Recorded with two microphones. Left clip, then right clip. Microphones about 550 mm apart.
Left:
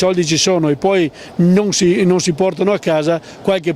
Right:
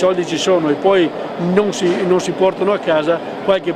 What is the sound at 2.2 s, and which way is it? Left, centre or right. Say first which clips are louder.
Speech: right 1 dB; left.